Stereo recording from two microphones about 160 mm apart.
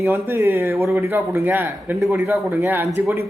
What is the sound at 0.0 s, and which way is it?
A man's voice, 15° right (ahead or behind).